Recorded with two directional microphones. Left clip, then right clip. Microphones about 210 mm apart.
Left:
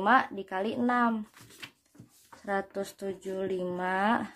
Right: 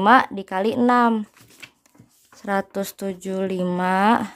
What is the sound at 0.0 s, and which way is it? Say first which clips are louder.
Speech: right 9 dB; 40° right (ahead or behind).